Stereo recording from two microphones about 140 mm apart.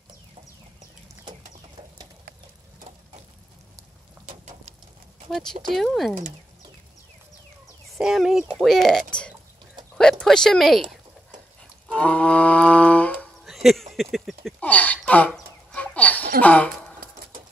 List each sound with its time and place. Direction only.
4.3 s a sound: 55° right (ahead or behind)
5.3 s speech: 5° left (ahead or behind)
8.0 s speech: 5° right (ahead or behind)
10.2 s speech: 5° left (ahead or behind)
11.9 s music: 10° left (ahead or behind)
13.5 s a sound: centre (ahead or behind)
15.3 s chicken: 10° left (ahead or behind)
16.3 s speech: 10° left (ahead or behind)